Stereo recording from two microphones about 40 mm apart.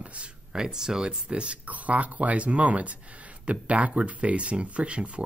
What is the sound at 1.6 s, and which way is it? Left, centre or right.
Speech, right.